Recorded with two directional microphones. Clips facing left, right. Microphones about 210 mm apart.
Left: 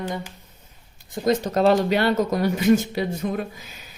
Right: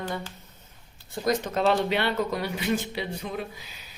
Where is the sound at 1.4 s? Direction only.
35° left (ahead or behind).